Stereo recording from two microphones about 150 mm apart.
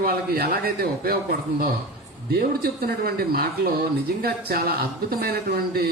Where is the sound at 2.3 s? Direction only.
85° right.